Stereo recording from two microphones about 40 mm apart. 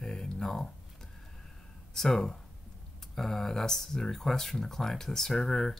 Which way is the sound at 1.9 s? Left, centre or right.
Centre.